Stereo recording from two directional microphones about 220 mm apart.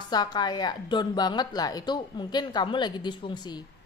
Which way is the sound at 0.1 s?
20° left (ahead or behind).